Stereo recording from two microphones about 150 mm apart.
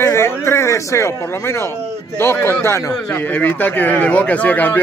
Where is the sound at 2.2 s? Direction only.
15° left (ahead or behind).